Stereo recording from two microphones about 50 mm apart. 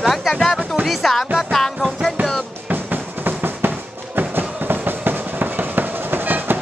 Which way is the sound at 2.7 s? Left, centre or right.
Right.